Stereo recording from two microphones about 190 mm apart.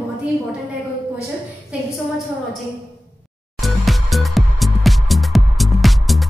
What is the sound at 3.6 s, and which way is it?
Music, centre (ahead or behind).